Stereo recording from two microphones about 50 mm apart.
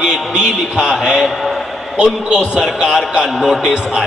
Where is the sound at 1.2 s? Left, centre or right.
Centre.